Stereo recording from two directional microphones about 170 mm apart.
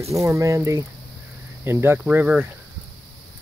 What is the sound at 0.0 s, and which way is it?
Speech, 20° right (ahead or behind).